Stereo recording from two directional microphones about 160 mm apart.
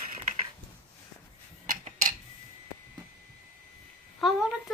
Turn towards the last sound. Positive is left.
turn(degrees=0)  # may be behind; listen again after turning